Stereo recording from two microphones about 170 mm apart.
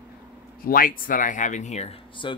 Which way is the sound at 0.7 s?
55° left (ahead or behind).